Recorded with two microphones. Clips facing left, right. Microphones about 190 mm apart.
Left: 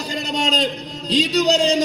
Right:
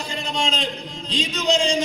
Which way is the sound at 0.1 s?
40° left (ahead or behind).